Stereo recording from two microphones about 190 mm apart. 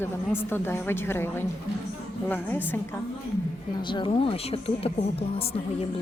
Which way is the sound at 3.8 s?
25° left (ahead or behind).